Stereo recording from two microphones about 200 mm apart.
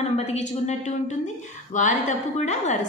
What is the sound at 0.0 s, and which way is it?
A woman's voice, 35° left (ahead or behind).